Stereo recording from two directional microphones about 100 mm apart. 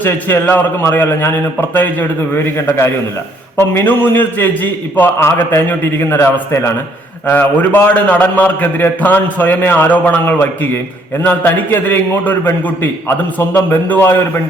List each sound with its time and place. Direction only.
0.0 s a man's voice: 20° left (ahead or behind)